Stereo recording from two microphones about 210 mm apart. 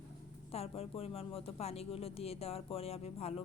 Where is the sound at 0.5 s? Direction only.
30° left (ahead or behind).